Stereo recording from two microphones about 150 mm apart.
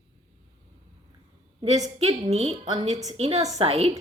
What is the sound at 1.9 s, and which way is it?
A woman's voice, 45° right (ahead or behind).